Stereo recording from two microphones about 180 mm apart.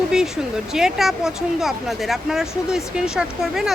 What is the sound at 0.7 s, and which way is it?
Speech, centre (ahead or behind).